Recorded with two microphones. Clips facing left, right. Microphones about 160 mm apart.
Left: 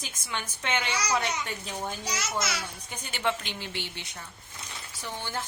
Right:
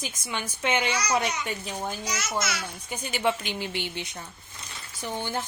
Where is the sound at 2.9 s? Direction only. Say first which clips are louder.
Right 4 dB; 10° right (ahead or behind).